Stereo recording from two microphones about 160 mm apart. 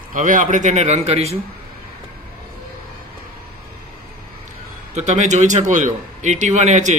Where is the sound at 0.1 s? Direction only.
55° right (ahead or behind); by 1.4 s 40° right (ahead or behind).